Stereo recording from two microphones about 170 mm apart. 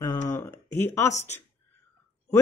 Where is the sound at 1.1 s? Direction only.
40° left (ahead or behind).